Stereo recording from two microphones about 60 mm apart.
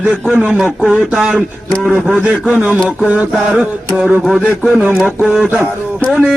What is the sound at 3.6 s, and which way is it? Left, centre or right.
Speech, centre.